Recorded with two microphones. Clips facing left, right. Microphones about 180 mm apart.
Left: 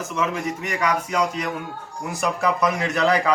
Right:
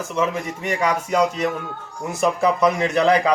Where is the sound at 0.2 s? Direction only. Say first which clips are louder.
Right 2 dB; 30° right (ahead or behind).